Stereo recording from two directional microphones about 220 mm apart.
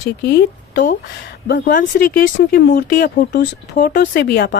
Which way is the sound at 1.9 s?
45° left (ahead or behind).